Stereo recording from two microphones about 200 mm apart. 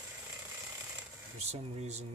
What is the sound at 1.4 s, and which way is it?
Speech, 30° right (ahead or behind).